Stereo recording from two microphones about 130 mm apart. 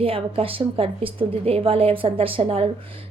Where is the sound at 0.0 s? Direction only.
45° right (ahead or behind).